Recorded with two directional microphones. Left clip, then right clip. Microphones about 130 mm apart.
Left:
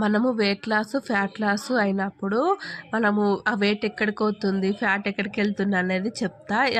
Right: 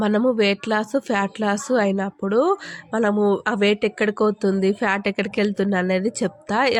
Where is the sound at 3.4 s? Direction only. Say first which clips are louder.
Right 4 dB; 40° right (ahead or behind).